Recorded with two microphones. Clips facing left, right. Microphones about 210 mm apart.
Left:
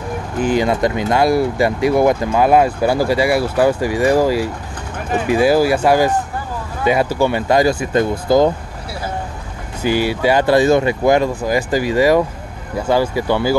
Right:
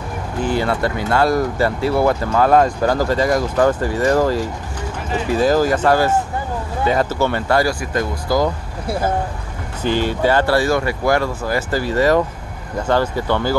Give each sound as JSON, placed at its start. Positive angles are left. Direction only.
{"t": 0.4, "sound": "speech", "side_deg": 15}
{"t": 9.8, "sound": "speech", "side_deg": 10}